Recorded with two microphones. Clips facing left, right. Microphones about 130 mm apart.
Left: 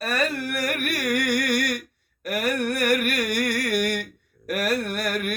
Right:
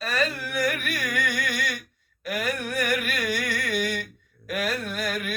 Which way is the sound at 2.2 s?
60° left (ahead or behind).